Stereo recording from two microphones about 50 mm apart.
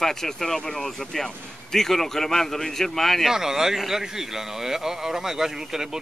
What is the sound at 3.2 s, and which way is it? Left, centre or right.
Speech, centre.